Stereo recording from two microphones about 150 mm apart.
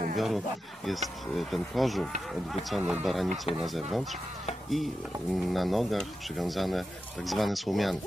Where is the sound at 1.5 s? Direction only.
Centre (ahead or behind).